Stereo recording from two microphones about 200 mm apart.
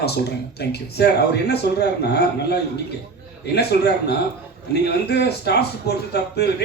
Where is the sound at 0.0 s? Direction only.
55° left (ahead or behind).